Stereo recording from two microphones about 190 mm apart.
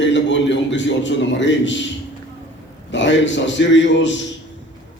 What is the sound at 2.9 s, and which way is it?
A man's voice, 70° left (ahead or behind).